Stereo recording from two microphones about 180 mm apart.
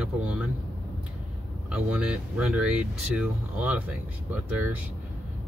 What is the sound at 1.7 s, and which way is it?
Speech, 5° right (ahead or behind).